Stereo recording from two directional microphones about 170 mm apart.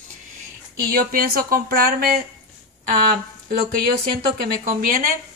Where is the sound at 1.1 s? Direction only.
60° right (ahead or behind).